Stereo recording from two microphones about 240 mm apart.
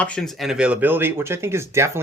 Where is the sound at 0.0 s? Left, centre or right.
Centre.